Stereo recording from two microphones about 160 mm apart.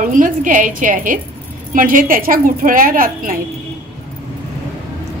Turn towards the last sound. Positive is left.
turn(degrees=-60)  # may be behind; listen again after turning